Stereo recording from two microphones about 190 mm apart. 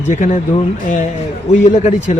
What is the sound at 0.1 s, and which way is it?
Speech, 40° left (ahead or behind).